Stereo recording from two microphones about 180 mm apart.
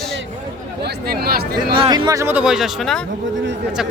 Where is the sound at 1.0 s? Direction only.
55° right (ahead or behind).